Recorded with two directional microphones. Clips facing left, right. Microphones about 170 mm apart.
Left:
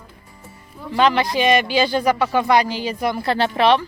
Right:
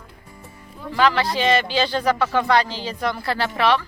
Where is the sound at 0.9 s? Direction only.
20° left (ahead or behind).